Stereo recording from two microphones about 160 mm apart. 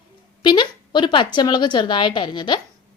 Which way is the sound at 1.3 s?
30° left (ahead or behind).